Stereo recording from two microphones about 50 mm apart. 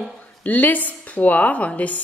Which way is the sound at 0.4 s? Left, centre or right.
Left.